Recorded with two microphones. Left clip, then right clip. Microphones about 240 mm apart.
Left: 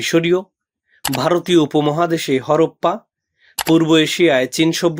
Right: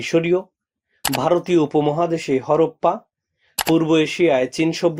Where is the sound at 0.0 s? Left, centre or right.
Left.